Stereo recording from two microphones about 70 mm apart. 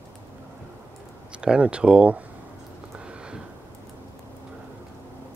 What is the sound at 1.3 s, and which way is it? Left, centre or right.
Speech, centre.